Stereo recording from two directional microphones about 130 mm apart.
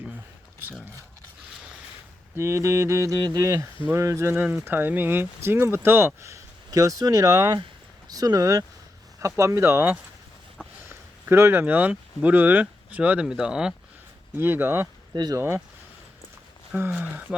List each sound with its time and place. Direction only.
2.3 s mantra: 20° right (ahead or behind)
3.8 s speech: 20° right (ahead or behind)
9.2 s mantra: 25° right (ahead or behind)
10.8 s speech: 20° right (ahead or behind)
14.3 s speech: 15° right (ahead or behind)
15.1 s speech: 35° right (ahead or behind)
15.4 s mantra: 20° right (ahead or behind)
16.7 s speech: 15° right (ahead or behind)